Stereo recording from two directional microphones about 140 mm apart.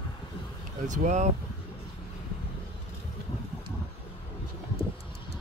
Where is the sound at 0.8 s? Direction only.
65° right (ahead or behind).